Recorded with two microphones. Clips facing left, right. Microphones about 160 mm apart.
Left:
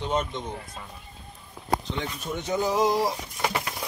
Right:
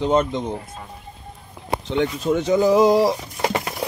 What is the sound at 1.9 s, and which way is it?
Speech, 85° right.